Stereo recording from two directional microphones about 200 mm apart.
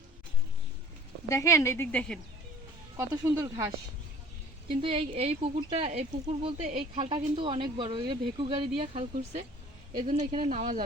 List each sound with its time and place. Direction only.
1.3 s speech: 15° left (ahead or behind)
3.0 s speech: 15° right (ahead or behind)
4.7 s a woman's voice: 25° right (ahead or behind)
10.5 s a woman's voice: 40° right (ahead or behind)